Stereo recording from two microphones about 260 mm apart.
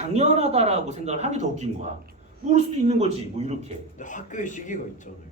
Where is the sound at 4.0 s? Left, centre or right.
Left.